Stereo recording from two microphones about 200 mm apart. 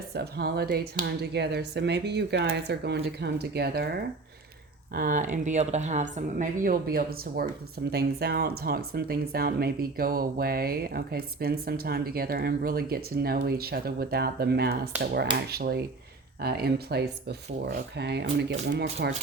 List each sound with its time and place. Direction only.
0.1 s speech: 50° right (ahead or behind)
4.9 s speech: 45° right (ahead or behind)